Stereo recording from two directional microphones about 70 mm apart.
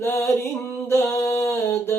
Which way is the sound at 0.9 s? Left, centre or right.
Left.